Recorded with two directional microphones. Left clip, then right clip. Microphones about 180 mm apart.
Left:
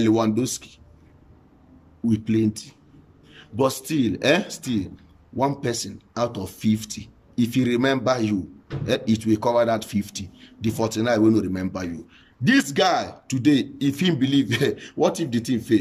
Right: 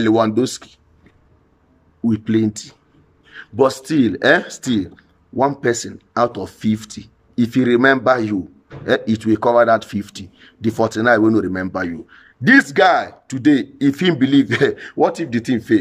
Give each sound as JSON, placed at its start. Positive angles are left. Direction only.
{"t": 0.0, "sound": "speech", "side_deg": 15}
{"t": 2.0, "sound": "speech", "side_deg": 15}